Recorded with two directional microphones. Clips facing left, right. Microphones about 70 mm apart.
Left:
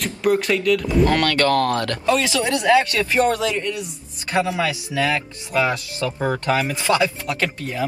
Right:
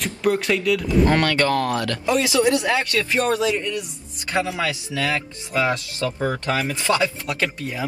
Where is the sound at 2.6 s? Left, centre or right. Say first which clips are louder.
Left 5 dB; left.